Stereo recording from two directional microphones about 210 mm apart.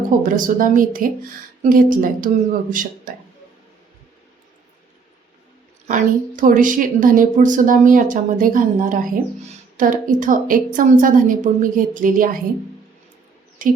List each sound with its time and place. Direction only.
0.2 s speech: 40° right (ahead or behind)
5.9 s speech: 40° right (ahead or behind)
13.6 s speech: 40° right (ahead or behind)